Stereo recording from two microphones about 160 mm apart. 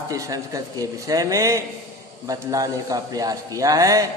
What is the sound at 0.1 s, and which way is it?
A man's voice, 20° right (ahead or behind).